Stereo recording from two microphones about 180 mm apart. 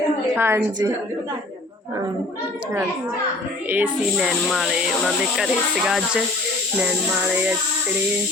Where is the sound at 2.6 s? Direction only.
10° right (ahead or behind).